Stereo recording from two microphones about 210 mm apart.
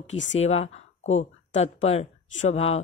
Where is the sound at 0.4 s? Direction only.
30° left (ahead or behind).